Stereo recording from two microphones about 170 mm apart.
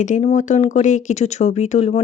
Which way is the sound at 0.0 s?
45° left (ahead or behind).